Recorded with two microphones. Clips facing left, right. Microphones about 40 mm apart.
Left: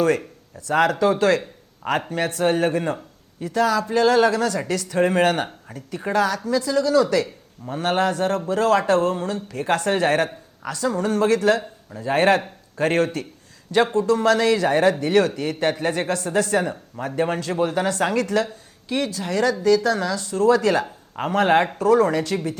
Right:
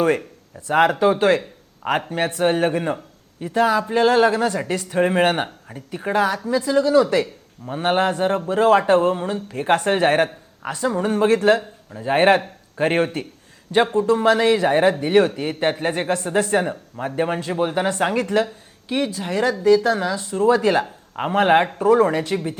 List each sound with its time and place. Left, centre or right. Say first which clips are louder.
0.7 s speech: right 2 dB; right